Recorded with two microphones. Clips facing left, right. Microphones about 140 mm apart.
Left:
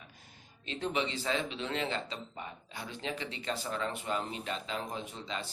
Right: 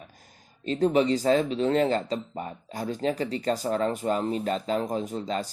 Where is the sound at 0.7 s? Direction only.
40° right (ahead or behind).